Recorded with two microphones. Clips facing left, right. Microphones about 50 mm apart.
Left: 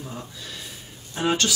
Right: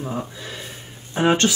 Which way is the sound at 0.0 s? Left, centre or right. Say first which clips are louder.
Right 8 dB; right.